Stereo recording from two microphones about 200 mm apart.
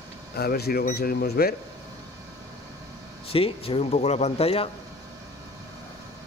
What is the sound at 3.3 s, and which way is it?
Speech, 30° left (ahead or behind).